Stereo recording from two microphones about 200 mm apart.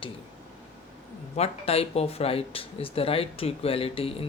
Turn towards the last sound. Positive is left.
turn(degrees=30)  # may be behind; listen again after turning